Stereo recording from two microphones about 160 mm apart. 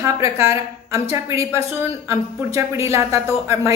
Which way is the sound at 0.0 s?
15° right (ahead or behind).